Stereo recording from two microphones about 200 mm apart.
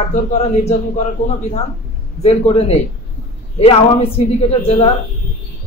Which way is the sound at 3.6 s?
30° left (ahead or behind).